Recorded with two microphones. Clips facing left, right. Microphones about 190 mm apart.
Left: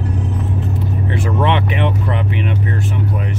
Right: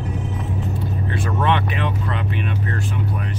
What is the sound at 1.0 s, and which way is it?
Speech, 20° left (ahead or behind).